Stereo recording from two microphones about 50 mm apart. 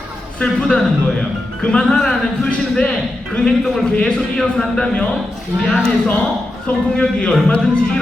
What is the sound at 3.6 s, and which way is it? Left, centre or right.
Speech, centre.